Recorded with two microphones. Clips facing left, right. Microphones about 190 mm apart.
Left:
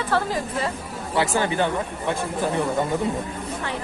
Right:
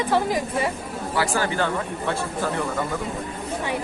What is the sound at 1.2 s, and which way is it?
Speech, 20° left (ahead or behind).